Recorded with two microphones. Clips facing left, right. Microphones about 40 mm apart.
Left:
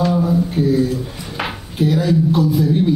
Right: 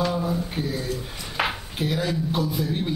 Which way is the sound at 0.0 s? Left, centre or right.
Centre.